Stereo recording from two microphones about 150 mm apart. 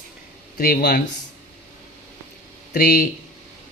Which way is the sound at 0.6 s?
85° left.